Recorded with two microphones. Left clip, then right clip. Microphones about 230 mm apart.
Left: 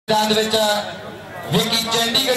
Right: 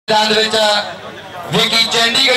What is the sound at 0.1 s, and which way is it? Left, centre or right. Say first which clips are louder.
A man's voice: right 5 dB; right.